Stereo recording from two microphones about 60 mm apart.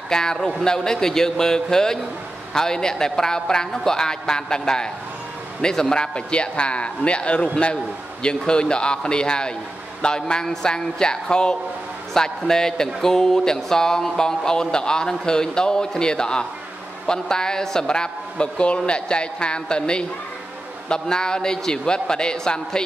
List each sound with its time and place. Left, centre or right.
0.1 s speech: centre